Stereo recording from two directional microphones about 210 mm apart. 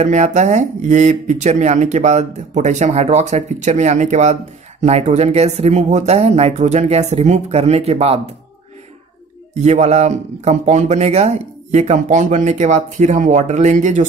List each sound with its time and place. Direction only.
0.0 s a man's voice: 35° right (ahead or behind)
9.5 s a man's voice: 35° right (ahead or behind)